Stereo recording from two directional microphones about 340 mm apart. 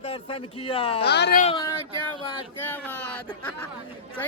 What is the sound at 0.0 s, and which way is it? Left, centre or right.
Speech, centre.